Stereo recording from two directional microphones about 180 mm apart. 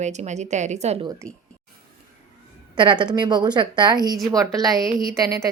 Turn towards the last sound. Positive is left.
turn(degrees=-20)  # may be behind; listen again after turning